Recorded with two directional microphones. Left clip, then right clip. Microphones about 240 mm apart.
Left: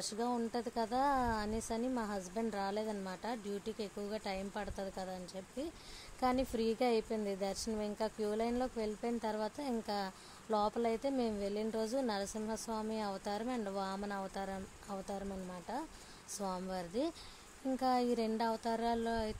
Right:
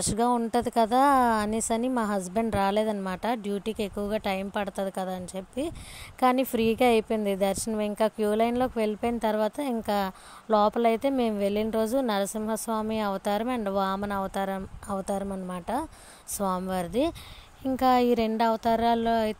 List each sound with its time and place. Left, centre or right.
0.0 s a woman's voice: right